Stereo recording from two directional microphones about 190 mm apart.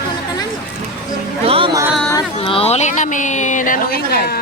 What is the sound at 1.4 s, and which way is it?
Music, 30° right (ahead or behind).